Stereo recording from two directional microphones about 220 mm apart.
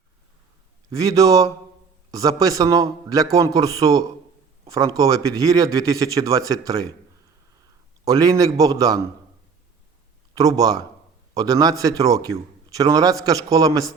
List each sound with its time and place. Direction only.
0.9 s a man's voice: 15° right (ahead or behind)
8.0 s a man's voice: 15° right (ahead or behind)
10.3 s a man's voice: 15° right (ahead or behind)